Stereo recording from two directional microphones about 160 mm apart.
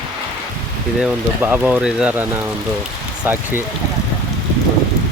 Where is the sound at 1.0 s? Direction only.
5° right (ahead or behind).